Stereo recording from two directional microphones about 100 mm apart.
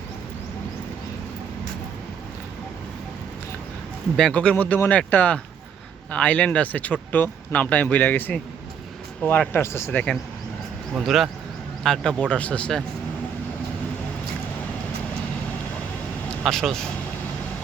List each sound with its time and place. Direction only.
4.2 s speech: 10° left (ahead or behind); by 10.0 s 25° left (ahead or behind)
10.9 s speech: centre (ahead or behind)
16.4 s speech: centre (ahead or behind)